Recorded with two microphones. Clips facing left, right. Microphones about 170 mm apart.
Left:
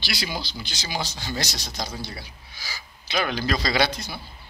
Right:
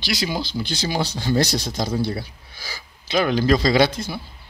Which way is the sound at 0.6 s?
55° right (ahead or behind).